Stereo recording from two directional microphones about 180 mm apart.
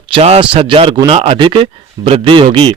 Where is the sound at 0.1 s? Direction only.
30° right (ahead or behind).